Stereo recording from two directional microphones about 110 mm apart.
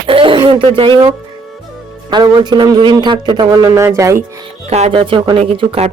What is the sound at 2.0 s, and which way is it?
Speech, 40° right (ahead or behind).